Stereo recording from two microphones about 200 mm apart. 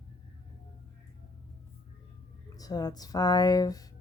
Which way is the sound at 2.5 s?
20° left (ahead or behind).